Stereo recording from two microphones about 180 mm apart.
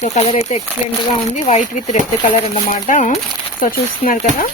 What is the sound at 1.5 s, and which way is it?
Speech, 40° left (ahead or behind).